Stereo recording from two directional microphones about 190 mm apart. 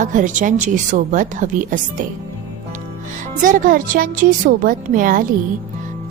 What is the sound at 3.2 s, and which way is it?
A woman's voice, 45° right (ahead or behind).